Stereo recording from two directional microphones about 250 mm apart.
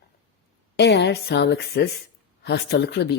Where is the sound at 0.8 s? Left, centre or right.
Left.